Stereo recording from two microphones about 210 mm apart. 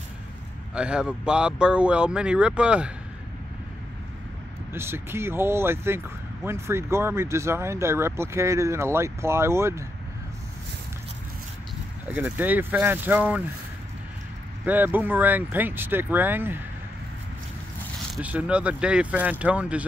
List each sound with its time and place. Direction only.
0.7 s speech: 5° right (ahead or behind)
4.7 s speech: 10° right (ahead or behind)
12.1 s speech: 10° right (ahead or behind)
14.7 s speech: 10° right (ahead or behind)
18.1 s speech: 5° right (ahead or behind)